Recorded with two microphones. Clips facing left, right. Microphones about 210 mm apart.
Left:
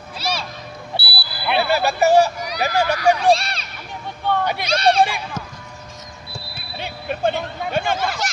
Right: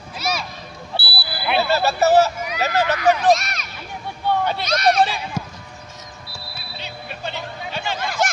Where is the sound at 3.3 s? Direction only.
30° left (ahead or behind).